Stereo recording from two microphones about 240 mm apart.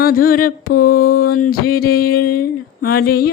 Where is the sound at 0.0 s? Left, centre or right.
Left.